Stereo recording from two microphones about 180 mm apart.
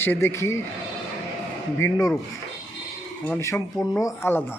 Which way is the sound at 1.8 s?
20° left (ahead or behind).